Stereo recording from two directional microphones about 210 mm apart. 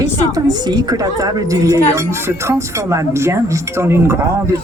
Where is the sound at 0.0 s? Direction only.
20° right (ahead or behind).